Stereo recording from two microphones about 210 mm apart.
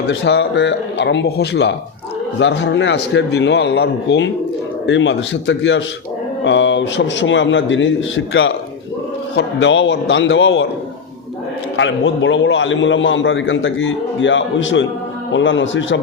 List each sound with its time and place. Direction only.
0.1 s a man's voice: 55° left (ahead or behind)
11.8 s a man's voice: 60° left (ahead or behind)